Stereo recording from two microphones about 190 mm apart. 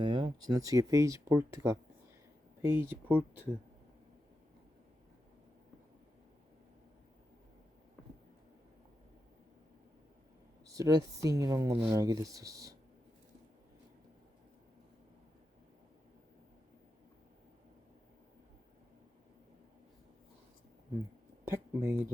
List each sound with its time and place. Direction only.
0.0 s speech: 25° right (ahead or behind)
10.8 s speech: 20° right (ahead or behind)
21.4 s speech: 10° right (ahead or behind)